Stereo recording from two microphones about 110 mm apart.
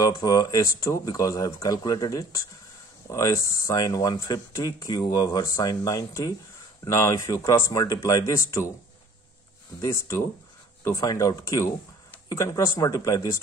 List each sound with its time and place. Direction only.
0.0 s speech: 35° left (ahead or behind)
9.8 s speech: 25° left (ahead or behind)